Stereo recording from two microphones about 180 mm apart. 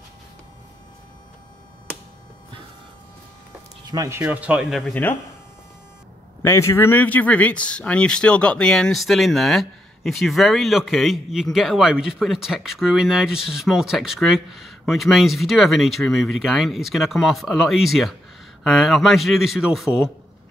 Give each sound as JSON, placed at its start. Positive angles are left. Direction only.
{"t": 3.8, "sound": "speech", "side_deg": -20}
{"t": 4.2, "sound": "speech", "side_deg": -10}
{"t": 6.4, "sound": "speech", "side_deg": 15}